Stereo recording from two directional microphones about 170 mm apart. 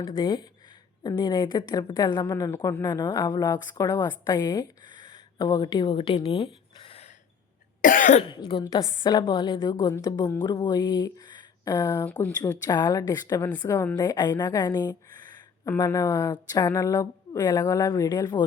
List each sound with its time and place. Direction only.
0.0 s a woman's voice: 30° left (ahead or behind)
4.9 s a sound: 50° right (ahead or behind)
5.4 s speech: 25° left (ahead or behind)
7.8 s cough: 50° left (ahead or behind)
8.3 s a woman's voice: 25° left (ahead or behind)